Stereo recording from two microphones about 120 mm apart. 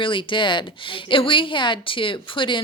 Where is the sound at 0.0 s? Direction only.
45° left (ahead or behind).